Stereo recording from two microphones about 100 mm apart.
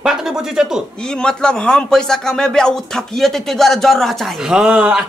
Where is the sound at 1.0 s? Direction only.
10° left (ahead or behind).